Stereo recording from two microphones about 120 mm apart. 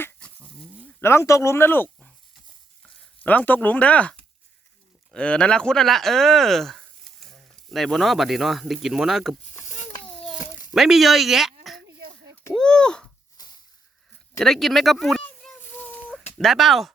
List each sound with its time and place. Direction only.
1.0 s speech: 25° left (ahead or behind)
3.2 s speech: 15° left (ahead or behind)
5.1 s speech: 10° left (ahead or behind)
10.8 s speech: 5° right (ahead or behind)
13.3 s a sound: 35° left (ahead or behind)
14.3 s speech: centre (ahead or behind)